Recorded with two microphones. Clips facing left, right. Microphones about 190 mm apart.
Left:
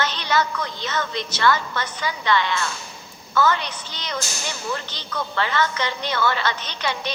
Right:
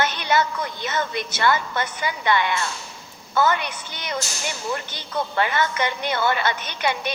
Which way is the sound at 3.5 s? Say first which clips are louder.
Right 1 dB; 50° right (ahead or behind).